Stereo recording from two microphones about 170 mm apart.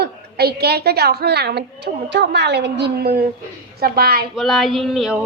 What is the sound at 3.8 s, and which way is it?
Speech, 60° right (ahead or behind).